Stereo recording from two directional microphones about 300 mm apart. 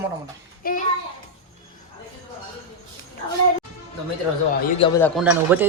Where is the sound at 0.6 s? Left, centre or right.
Left.